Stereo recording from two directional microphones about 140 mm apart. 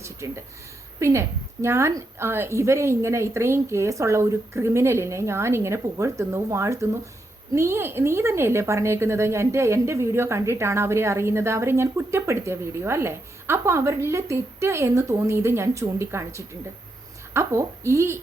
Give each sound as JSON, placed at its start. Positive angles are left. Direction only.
{"t": 0.0, "sound": "a woman's voice", "side_deg": -20}